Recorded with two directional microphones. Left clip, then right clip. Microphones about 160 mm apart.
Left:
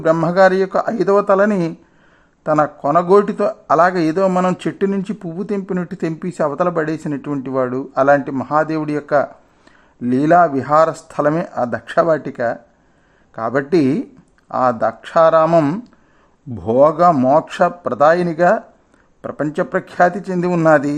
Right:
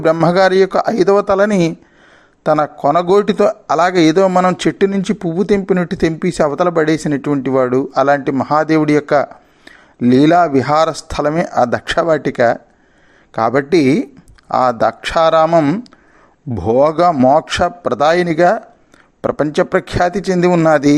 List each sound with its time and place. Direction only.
0.0 s speech: 20° right (ahead or behind)
15.4 s speech: centre (ahead or behind)
16.6 s speech: 20° right (ahead or behind)
19.2 s speech: 35° right (ahead or behind)
19.5 s speech: 20° right (ahead or behind)